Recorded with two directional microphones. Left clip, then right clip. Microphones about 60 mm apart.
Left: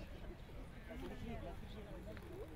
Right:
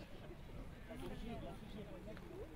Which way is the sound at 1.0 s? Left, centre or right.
Right.